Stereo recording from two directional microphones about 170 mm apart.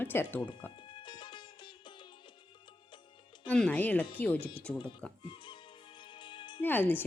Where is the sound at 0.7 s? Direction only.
25° left (ahead or behind).